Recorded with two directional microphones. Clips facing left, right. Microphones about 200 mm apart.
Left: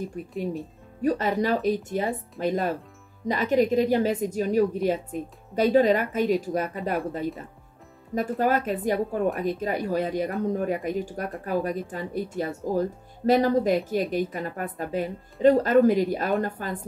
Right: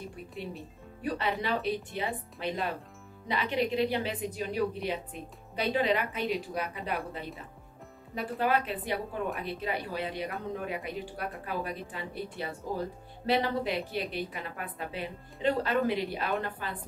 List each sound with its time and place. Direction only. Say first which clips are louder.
0.2 s a woman's voice: left 11 dB; 45° left (ahead or behind)